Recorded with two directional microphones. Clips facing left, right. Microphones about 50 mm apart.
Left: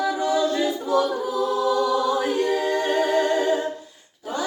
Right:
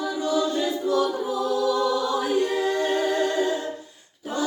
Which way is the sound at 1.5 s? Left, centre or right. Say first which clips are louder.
Left 1 dB; left.